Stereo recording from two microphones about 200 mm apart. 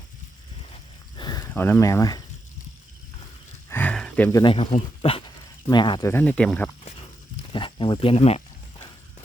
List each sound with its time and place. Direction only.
0.7 s a sound: 20° left (ahead or behind)
3.7 s a sound: 10° left (ahead or behind)
4.3 s speech: 15° left (ahead or behind)
4.5 s speech: 30° left (ahead or behind)
6.1 s speech: 10° left (ahead or behind)
7.5 s speech: 25° left (ahead or behind)